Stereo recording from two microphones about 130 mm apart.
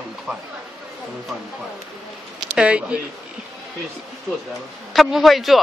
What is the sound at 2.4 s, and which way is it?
Speech, 10° right (ahead or behind).